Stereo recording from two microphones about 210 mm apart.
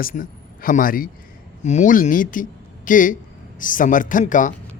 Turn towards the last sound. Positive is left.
turn(degrees=40)  # may be behind; listen again after turning